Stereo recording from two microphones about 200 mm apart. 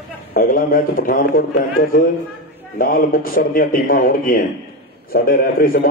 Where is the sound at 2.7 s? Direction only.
45° left (ahead or behind).